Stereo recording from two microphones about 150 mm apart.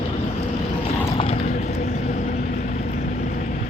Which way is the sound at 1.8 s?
55° left (ahead or behind).